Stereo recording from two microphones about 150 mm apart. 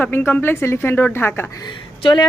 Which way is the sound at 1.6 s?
30° left (ahead or behind).